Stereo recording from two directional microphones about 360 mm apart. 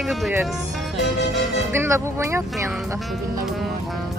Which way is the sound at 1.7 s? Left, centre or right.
Centre.